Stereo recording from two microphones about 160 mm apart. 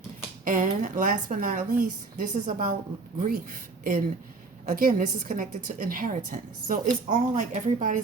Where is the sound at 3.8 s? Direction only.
60° right (ahead or behind).